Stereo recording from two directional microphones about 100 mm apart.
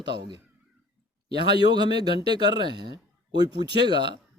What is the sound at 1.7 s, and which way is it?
Speech, 45° right (ahead or behind).